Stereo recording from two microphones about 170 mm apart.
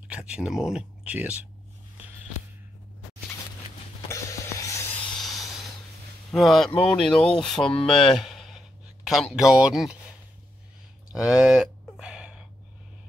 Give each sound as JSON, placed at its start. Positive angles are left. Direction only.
{"t": 0.1, "sound": "speech", "side_deg": -5}
{"t": 4.1, "sound": "music", "side_deg": 20}
{"t": 5.2, "sound": "snort", "side_deg": 0}
{"t": 6.3, "sound": "speech", "side_deg": 0}
{"t": 11.1, "sound": "a sound", "side_deg": -5}